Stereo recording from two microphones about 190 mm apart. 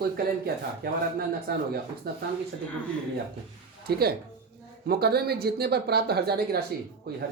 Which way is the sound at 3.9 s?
55° right (ahead or behind).